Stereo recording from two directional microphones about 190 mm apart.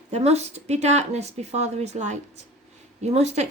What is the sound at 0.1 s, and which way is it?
Speech, 35° right (ahead or behind).